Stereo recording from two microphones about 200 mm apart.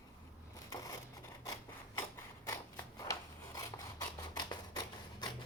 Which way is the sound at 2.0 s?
15° left (ahead or behind).